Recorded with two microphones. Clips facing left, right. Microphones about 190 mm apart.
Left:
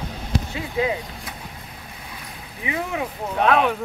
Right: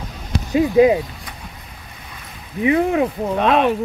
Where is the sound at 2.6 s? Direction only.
50° right (ahead or behind).